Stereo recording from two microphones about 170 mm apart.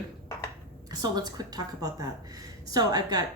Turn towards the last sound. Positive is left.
turn(degrees=-25)  # may be behind; listen again after turning